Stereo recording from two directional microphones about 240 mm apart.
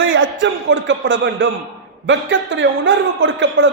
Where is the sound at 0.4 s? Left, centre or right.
Right.